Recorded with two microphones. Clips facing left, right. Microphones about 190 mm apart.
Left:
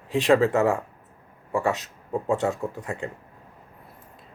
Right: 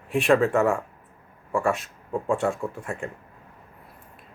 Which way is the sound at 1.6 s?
20° left (ahead or behind).